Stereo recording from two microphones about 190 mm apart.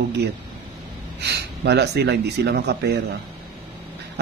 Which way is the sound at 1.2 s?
60° right (ahead or behind).